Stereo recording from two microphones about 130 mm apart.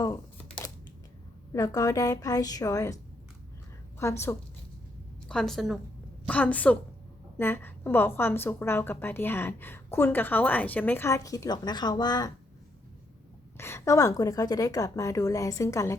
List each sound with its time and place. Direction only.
1.5 s a woman's voice: 30° left (ahead or behind)
4.0 s a woman's voice: 20° left (ahead or behind)
5.3 s a woman's voice: 5° left (ahead or behind)
6.2 s a woman's voice: 10° left (ahead or behind); by 12.3 s 30° left (ahead or behind)
13.6 s a woman's voice: 20° left (ahead or behind)